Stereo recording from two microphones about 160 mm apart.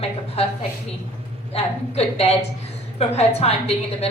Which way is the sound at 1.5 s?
40° left (ahead or behind).